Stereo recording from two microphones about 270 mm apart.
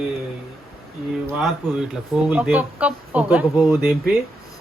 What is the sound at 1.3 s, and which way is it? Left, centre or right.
Speech, centre.